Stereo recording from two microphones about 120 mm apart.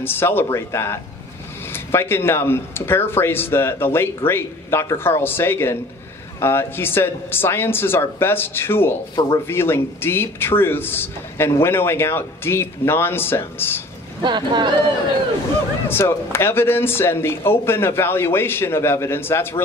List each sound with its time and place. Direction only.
0.0 s speech: 20° left (ahead or behind)
14.2 s speech: 40° right (ahead or behind)
15.9 s speech: 20° left (ahead or behind)